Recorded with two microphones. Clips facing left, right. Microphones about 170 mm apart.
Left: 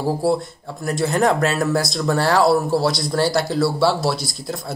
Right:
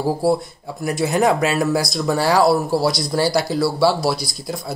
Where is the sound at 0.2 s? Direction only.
5° right (ahead or behind).